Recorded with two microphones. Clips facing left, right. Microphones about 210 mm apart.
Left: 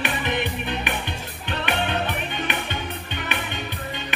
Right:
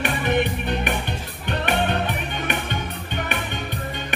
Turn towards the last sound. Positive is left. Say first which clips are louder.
# right 2 dB
turn(degrees=-50)  # may be behind; listen again after turning